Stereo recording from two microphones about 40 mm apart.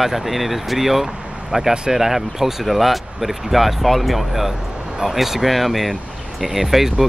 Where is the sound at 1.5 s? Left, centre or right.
Centre.